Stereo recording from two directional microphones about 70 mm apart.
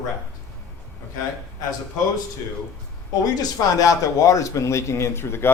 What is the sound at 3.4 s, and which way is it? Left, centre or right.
A man's voice, left.